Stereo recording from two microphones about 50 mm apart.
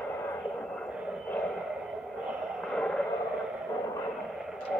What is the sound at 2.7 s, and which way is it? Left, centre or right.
Vehicle, centre.